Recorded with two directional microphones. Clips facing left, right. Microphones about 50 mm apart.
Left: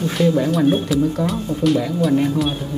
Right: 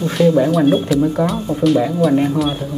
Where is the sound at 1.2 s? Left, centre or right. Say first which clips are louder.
Right 4 dB; right.